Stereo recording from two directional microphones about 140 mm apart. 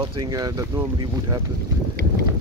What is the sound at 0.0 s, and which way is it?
Speech, 40° right (ahead or behind).